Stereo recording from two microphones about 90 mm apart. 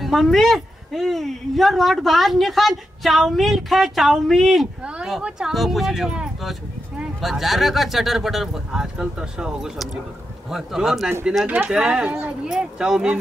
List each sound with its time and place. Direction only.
0.0 s a woman's voice: centre (ahead or behind)
4.8 s a sound: 10° right (ahead or behind)
5.1 s a woman's voice: 5° right (ahead or behind)
11.4 s speech: 20° right (ahead or behind)
11.7 s speech: 10° right (ahead or behind)